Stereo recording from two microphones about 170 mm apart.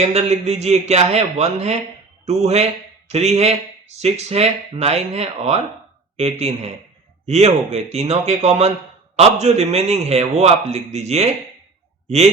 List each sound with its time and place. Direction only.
0.0 s speech: 40° right (ahead or behind)